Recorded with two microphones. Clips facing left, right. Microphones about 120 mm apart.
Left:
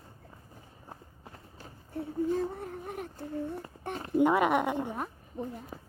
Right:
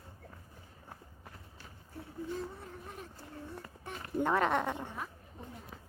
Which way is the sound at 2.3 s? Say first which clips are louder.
Left 9 dB; 55° left (ahead or behind).